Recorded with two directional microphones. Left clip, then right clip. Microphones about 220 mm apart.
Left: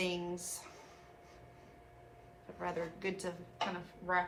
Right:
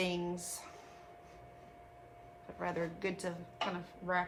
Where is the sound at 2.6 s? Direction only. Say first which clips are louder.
Right 1 dB; 35° right (ahead or behind).